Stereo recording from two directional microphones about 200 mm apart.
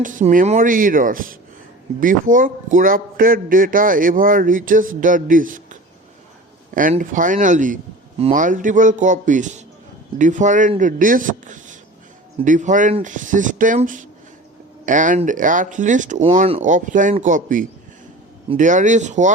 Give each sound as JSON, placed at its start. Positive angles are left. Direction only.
{"t": 0.0, "sound": "a man's voice", "side_deg": -40}
{"t": 6.7, "sound": "speech", "side_deg": -40}